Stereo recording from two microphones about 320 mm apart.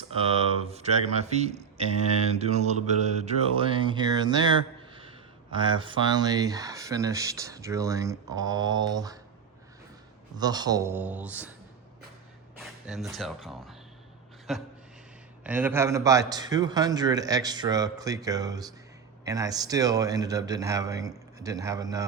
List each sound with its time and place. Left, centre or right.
0.2 s speech: centre
2.3 s mantra: centre
10.3 s mantra: centre
12.5 s speech: centre
15.4 s mantra: centre